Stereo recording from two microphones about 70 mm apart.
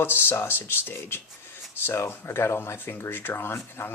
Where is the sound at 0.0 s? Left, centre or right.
Left.